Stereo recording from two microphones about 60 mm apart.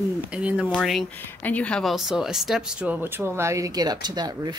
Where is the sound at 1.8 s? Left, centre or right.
Centre.